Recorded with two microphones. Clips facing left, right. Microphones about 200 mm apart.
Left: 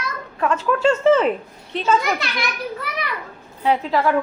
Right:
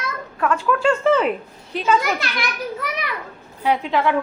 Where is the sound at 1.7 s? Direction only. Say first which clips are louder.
Even; centre (ahead or behind).